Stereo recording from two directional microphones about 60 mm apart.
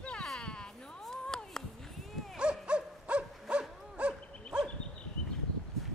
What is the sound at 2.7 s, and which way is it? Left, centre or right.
Dog, centre.